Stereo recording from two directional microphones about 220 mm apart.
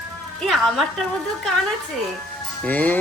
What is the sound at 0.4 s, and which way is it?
Speech, centre (ahead or behind).